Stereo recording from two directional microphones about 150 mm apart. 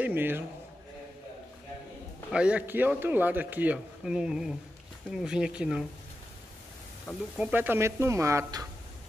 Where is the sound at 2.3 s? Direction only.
5° right (ahead or behind).